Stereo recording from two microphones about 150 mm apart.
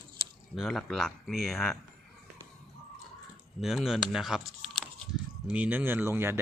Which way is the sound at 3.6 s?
5° right (ahead or behind).